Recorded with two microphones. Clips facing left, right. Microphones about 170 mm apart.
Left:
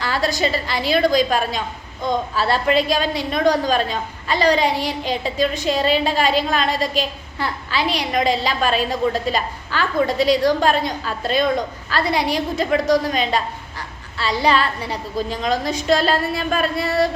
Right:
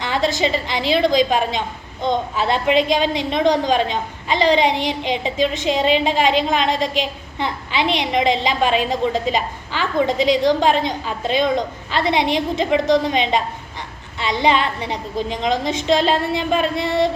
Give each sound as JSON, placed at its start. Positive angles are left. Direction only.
{"t": 0.0, "sound": "a woman's voice", "side_deg": -20}